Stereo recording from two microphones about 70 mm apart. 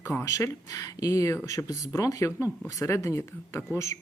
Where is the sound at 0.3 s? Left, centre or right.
Left.